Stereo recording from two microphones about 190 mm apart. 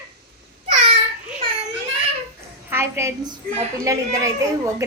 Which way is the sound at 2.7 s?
15° right (ahead or behind).